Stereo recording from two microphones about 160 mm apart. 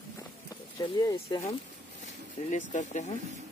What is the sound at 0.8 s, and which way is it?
Speech, 25° left (ahead or behind).